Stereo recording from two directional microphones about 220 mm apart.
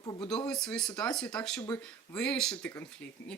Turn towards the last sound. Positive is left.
turn(degrees=5)  # may be behind; listen again after turning